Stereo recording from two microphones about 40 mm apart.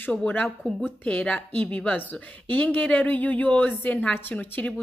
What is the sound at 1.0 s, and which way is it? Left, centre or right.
Speech, left.